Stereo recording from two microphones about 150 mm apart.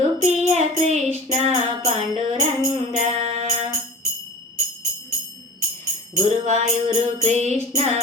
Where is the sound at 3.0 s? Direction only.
45° right (ahead or behind).